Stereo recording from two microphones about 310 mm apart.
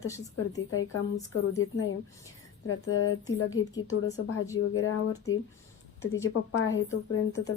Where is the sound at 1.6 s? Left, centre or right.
Left.